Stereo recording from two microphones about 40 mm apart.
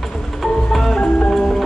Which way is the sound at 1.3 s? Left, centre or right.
Centre.